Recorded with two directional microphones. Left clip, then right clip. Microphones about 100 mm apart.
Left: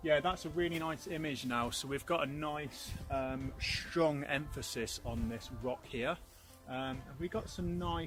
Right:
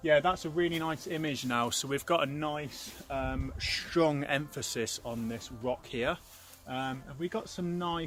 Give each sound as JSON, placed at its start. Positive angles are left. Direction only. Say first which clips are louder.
{"t": 0.0, "sound": "speech", "louder": "right 6 dB", "side_deg": -40}